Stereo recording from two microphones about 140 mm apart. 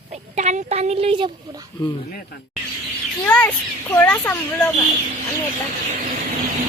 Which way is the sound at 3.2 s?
10° left (ahead or behind).